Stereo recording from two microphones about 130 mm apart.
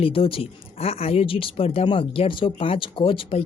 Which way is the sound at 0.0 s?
45° left (ahead or behind).